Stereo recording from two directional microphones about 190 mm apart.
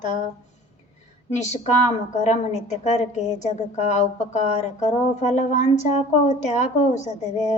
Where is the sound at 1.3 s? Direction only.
35° left (ahead or behind).